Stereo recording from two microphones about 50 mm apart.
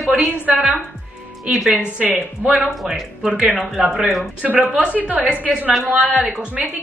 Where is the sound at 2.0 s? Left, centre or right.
Right.